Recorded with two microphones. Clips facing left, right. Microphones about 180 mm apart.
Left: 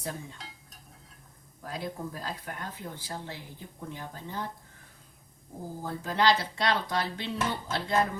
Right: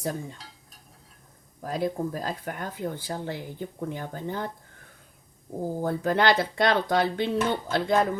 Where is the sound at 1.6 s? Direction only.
45° right (ahead or behind).